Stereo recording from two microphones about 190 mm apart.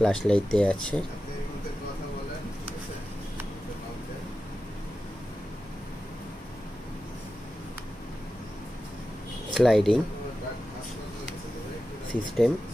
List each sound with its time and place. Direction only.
0.0 s speech: 5° left (ahead or behind)
9.5 s speech: centre (ahead or behind)
12.1 s speech: centre (ahead or behind)